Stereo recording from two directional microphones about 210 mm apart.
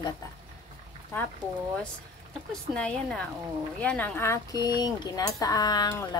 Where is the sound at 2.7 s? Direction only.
5° left (ahead or behind).